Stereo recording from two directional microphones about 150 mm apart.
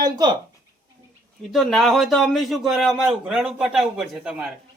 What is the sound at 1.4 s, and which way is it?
A man's voice, centre (ahead or behind).